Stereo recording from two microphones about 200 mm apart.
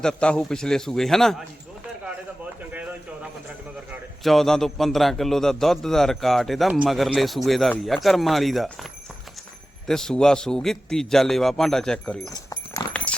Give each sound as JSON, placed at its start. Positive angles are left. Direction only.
{"t": 0.0, "sound": "a man's voice", "side_deg": 5}
{"t": 4.2, "sound": "a man's voice", "side_deg": 0}
{"t": 12.3, "sound": "dog", "side_deg": 15}
{"t": 13.1, "sound": "clip-clop", "side_deg": 5}